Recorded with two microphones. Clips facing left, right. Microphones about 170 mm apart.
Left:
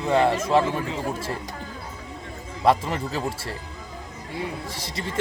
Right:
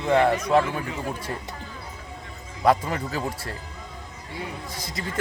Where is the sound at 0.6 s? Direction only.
30° left (ahead or behind).